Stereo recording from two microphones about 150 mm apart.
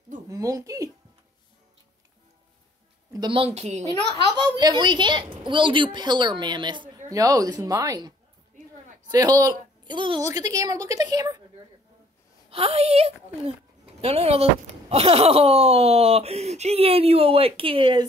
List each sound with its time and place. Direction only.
0.3 s a woman's voice: 25° right (ahead or behind)
3.1 s speech: 30° right (ahead or behind); by 3.8 s 45° right (ahead or behind)
3.8 s a child's voice: 25° right (ahead or behind)
9.1 s a woman's voice: 25° right (ahead or behind)
12.4 s speech: 40° right (ahead or behind)